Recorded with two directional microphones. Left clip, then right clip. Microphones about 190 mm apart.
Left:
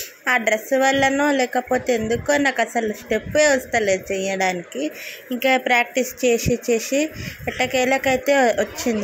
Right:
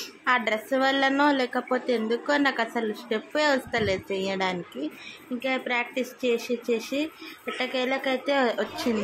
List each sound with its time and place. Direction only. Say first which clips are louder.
0.2 s a woman's voice: left 5 dB; 10° left (ahead or behind)